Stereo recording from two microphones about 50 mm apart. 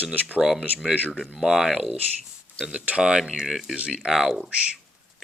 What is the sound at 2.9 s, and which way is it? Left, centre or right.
Speech, centre.